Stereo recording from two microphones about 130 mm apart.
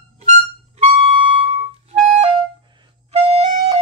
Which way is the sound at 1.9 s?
55° right (ahead or behind).